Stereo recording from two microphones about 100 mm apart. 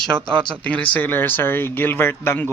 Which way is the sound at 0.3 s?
10° left (ahead or behind).